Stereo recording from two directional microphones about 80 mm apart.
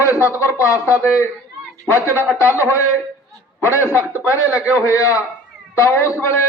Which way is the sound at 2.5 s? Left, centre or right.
Left.